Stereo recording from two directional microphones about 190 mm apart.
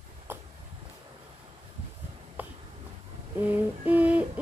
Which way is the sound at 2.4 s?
10° right (ahead or behind).